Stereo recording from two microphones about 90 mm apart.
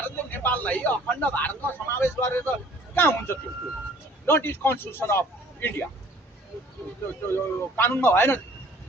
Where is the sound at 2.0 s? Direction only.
30° left (ahead or behind).